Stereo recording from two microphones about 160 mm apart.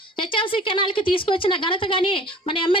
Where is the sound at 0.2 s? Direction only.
30° left (ahead or behind).